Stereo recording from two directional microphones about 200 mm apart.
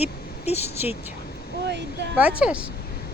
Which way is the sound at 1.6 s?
60° right (ahead or behind).